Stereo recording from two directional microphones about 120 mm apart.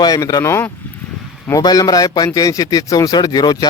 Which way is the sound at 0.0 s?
30° left (ahead or behind).